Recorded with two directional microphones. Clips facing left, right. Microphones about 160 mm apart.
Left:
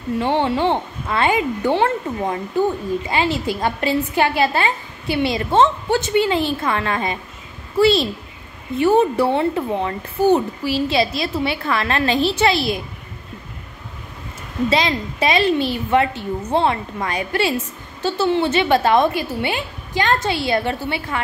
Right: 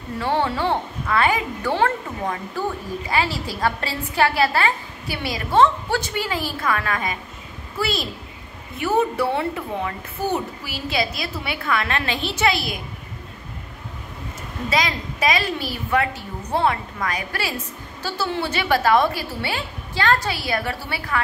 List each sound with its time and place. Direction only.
0.2 s a woman's voice: 20° left (ahead or behind)
14.7 s a woman's voice: 25° left (ahead or behind)